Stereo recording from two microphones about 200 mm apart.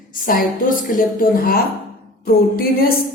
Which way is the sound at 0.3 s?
45° left (ahead or behind).